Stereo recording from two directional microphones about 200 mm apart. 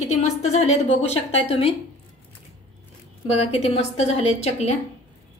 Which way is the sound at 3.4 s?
30° left (ahead or behind).